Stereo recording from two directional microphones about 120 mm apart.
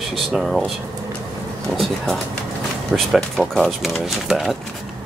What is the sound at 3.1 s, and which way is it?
Speech, centre (ahead or behind).